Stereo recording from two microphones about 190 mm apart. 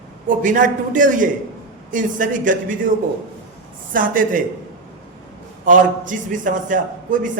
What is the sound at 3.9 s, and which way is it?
Speech, 45° right (ahead or behind).